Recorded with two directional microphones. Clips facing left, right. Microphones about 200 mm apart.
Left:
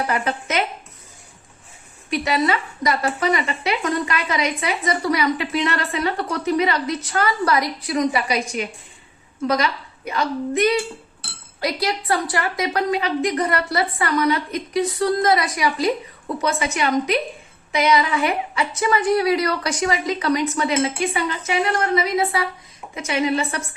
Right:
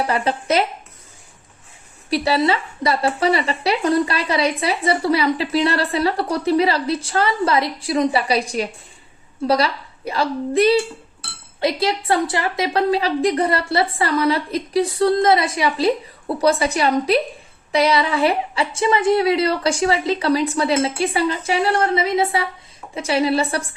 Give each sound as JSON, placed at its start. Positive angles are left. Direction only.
{"t": 0.1, "sound": "speech", "side_deg": -30}
{"t": 2.0, "sound": "a woman's voice", "side_deg": -35}